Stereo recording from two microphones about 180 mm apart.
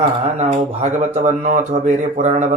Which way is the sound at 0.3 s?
35° right (ahead or behind).